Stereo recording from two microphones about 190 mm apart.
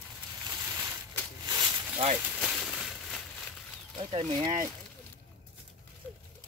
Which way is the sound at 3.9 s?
25° right (ahead or behind).